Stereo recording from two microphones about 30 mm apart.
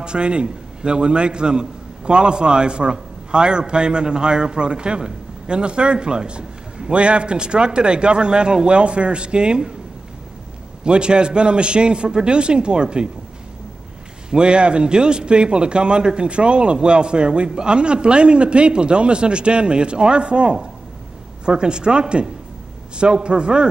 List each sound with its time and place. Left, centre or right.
0.0 s a man's voice: right
10.8 s a man's voice: right
14.3 s a man's voice: right